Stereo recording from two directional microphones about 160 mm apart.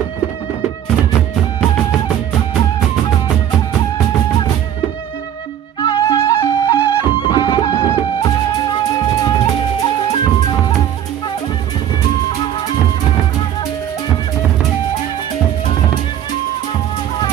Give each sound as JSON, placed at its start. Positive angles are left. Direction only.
{"t": 5.8, "sound": "music", "side_deg": 25}
{"t": 6.6, "sound": "music", "side_deg": 35}